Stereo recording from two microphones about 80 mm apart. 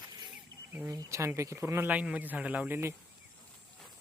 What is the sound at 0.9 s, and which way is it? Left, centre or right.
Speech, right.